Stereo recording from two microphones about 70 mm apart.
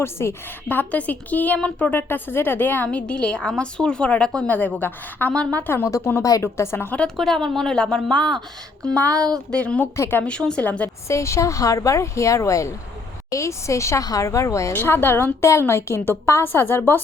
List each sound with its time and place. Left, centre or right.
0.0 s a woman's voice: left
0.7 s a woman's voice: left
1.9 s a woman's voice: left
4.4 s a woman's voice: left
5.7 s a woman's voice: left
7.2 s a woman's voice: centre
10.8 s speech: left
14.0 s speech: left
14.7 s a woman's voice: left